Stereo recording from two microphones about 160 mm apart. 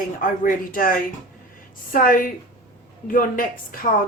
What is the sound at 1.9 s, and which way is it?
Speech, 60° left (ahead or behind).